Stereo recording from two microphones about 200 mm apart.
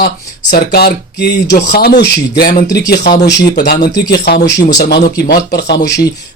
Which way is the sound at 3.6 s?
55° left (ahead or behind).